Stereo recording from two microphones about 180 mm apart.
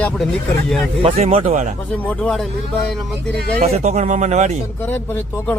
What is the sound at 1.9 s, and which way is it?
Speech, 5° left (ahead or behind).